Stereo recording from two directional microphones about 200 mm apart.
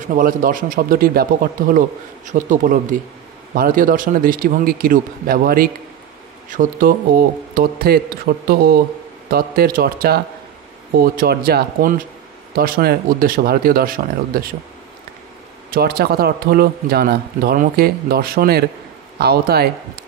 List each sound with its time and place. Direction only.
0.1 s speech: 45° right (ahead or behind)
15.7 s speech: 50° right (ahead or behind)